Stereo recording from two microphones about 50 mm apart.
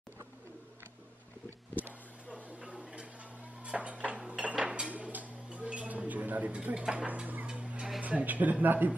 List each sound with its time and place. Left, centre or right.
2.6 s a sound: right
3.6 s dishes: right
4.6 s music: right
6.7 s speech: centre
7.1 s tick-tock: right
7.5 s music: right
8.0 s speech: right